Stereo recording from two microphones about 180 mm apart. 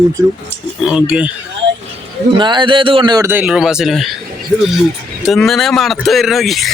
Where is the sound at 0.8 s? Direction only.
5° right (ahead or behind).